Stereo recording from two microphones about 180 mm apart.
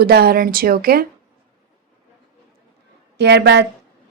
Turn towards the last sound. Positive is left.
turn(degrees=-70)  # may be behind; listen again after turning